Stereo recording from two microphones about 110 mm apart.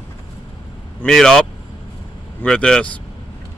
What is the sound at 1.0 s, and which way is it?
Speech, 5° left (ahead or behind).